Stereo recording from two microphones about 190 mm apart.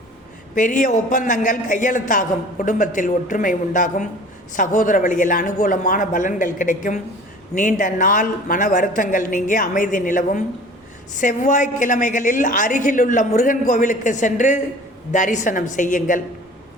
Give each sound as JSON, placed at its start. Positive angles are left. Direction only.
{"t": 0.5, "sound": "a man's voice", "side_deg": 45}